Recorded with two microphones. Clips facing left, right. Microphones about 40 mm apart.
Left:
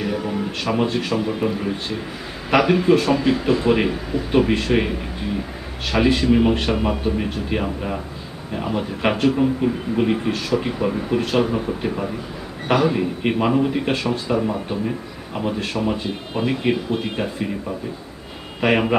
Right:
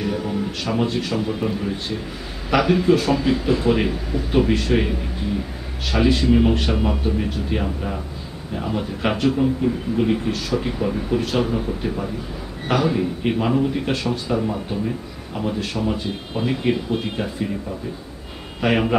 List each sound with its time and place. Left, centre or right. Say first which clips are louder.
0.8 s speech: left 1 dB; centre
15.9 s speech: left 1 dB; centre
18.6 s speech: left 1 dB; centre